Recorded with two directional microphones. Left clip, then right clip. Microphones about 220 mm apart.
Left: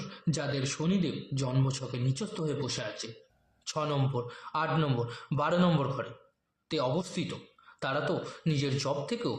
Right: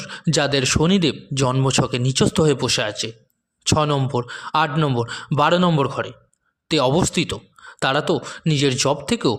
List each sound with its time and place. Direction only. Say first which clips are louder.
0.0 s speech: right 15 dB; 40° right (ahead or behind)